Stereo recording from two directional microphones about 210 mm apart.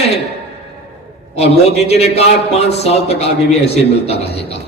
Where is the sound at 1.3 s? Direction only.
30° left (ahead or behind).